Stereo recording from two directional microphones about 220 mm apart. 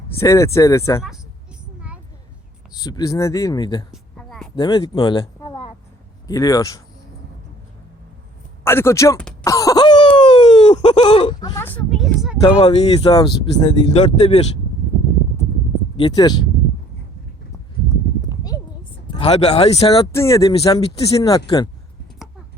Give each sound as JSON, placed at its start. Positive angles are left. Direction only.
{"t": 0.2, "sound": "speech", "side_deg": 15}
{"t": 2.7, "sound": "speech", "side_deg": 15}
{"t": 3.9, "sound": "a sound", "side_deg": 0}
{"t": 4.5, "sound": "speech", "side_deg": 20}
{"t": 8.6, "sound": "speech", "side_deg": 10}
{"t": 9.4, "sound": "a sound", "side_deg": 15}
{"t": 12.4, "sound": "speech", "side_deg": 20}
{"t": 13.9, "sound": "speech", "side_deg": 30}
{"t": 16.0, "sound": "speech", "side_deg": 20}
{"t": 18.3, "sound": "a sound", "side_deg": 15}
{"t": 19.0, "sound": "speech", "side_deg": 25}
{"t": 20.1, "sound": "speech", "side_deg": 15}
{"t": 20.5, "sound": "speech", "side_deg": 25}
{"t": 21.2, "sound": "speech", "side_deg": 15}